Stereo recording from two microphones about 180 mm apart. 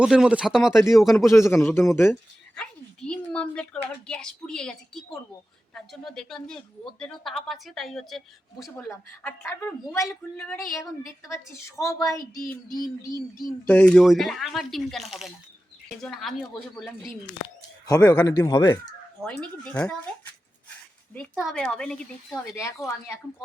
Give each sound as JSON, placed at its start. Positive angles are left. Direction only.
{"t": 0.0, "sound": "speech", "side_deg": -5}
{"t": 1.3, "sound": "a woman's voice", "side_deg": 15}
{"t": 8.7, "sound": "a woman's voice", "side_deg": 10}
{"t": 12.2, "sound": "speech", "side_deg": 55}
{"t": 13.7, "sound": "speech", "side_deg": 10}
{"t": 17.8, "sound": "speech", "side_deg": 20}
{"t": 19.2, "sound": "speech", "side_deg": 5}
{"t": 21.1, "sound": "speech", "side_deg": 5}
{"t": 22.5, "sound": "a woman's voice", "side_deg": 15}